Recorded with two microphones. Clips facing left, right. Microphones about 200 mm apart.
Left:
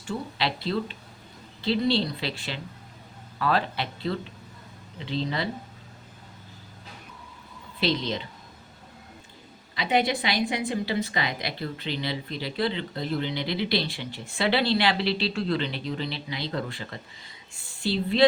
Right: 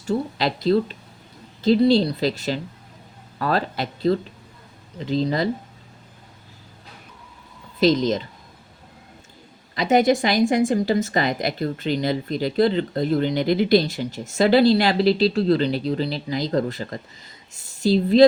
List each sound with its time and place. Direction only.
0.0 s speech: 40° right (ahead or behind)
7.8 s speech: 45° right (ahead or behind)
9.7 s speech: 45° right (ahead or behind)